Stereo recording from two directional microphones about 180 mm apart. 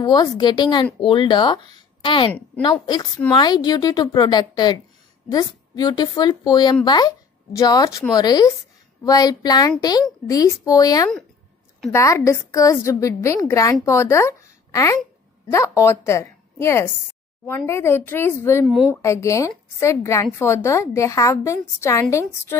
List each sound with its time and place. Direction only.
0.0 s a woman's voice: 20° left (ahead or behind)
3.3 s a woman's voice: 20° left (ahead or behind)